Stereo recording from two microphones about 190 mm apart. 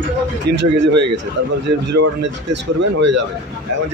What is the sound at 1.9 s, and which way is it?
Speech, 65° right (ahead or behind).